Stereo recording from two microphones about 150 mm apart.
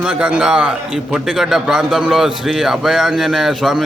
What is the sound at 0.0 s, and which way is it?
A man's voice, 5° right (ahead or behind).